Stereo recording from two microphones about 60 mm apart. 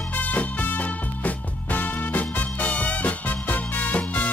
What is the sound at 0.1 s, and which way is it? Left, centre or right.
Music, left.